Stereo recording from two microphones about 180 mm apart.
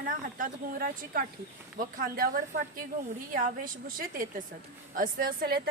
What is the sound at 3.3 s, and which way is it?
A woman's voice, 50° right (ahead or behind).